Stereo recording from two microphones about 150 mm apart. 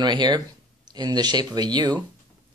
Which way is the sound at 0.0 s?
30° right (ahead or behind).